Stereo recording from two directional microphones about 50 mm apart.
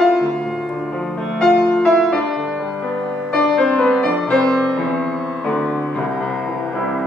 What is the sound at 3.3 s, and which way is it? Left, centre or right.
Music, centre.